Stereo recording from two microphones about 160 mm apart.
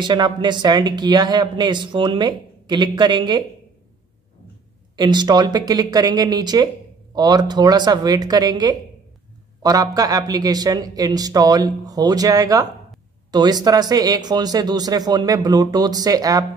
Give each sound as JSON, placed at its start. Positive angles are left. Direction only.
{"t": 0.0, "sound": "speech", "side_deg": -30}
{"t": 4.9, "sound": "speech", "side_deg": -25}